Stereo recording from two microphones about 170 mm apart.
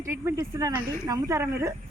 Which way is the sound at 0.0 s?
15° right (ahead or behind).